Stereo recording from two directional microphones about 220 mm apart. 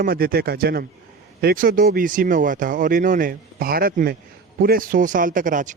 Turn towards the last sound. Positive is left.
turn(degrees=-35)  # may be behind; listen again after turning